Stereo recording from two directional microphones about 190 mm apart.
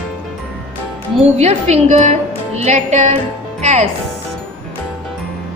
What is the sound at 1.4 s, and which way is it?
A woman's voice, 30° right (ahead or behind).